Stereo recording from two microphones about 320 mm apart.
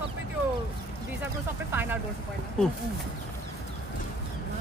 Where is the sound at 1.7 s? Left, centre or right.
Centre.